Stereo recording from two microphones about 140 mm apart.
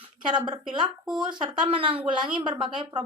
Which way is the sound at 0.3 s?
30° right (ahead or behind).